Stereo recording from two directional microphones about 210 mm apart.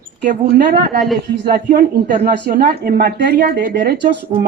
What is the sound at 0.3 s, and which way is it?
A woman's voice, 40° right (ahead or behind).